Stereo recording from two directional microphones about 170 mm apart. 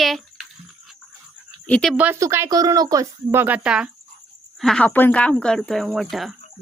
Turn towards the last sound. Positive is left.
turn(degrees=0)  # may be behind; listen again after turning